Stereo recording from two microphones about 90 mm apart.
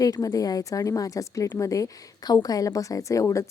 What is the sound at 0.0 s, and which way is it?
A woman's voice, 40° left (ahead or behind).